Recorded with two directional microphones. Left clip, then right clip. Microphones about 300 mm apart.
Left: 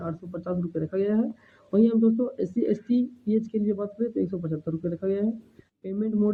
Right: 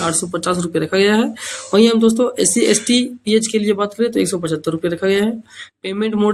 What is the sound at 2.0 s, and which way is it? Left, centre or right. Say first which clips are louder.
Speech: right 10 dB; right.